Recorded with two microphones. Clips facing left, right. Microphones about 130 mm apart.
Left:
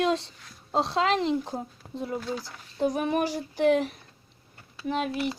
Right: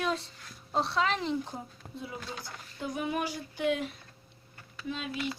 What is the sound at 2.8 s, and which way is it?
Female singing, 40° left (ahead or behind).